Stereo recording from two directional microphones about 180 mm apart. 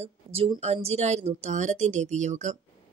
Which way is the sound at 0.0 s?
30° right (ahead or behind).